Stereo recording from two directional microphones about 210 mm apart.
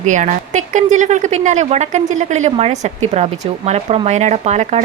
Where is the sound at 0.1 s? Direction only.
35° right (ahead or behind).